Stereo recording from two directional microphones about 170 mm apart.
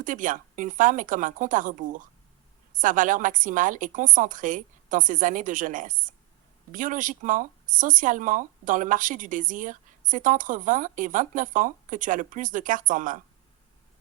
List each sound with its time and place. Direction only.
0.0 s speech: 50° right (ahead or behind)